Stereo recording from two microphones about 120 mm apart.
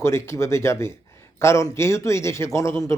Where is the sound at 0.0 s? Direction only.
20° left (ahead or behind).